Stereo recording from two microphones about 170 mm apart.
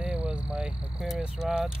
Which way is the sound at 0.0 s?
5° right (ahead or behind).